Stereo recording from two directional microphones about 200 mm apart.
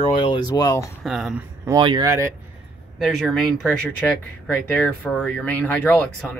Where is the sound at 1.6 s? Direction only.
20° right (ahead or behind).